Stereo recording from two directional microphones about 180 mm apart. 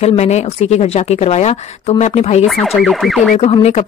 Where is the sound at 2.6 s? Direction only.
Centre (ahead or behind).